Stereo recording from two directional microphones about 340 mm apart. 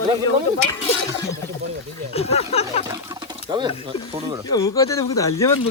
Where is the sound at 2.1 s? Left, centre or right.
Centre.